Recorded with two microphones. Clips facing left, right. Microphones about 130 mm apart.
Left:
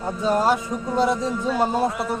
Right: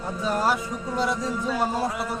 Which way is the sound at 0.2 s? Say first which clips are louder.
Left 4 dB; 25° left (ahead or behind).